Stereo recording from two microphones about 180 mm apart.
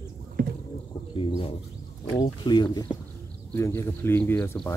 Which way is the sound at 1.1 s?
30° left (ahead or behind).